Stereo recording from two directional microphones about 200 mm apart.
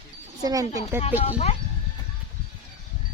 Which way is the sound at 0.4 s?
15° right (ahead or behind).